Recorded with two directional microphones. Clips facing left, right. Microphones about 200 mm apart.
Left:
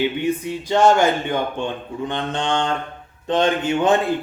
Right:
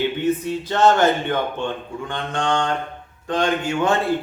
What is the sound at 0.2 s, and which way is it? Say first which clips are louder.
Speech: right 1 dB; 15° left (ahead or behind).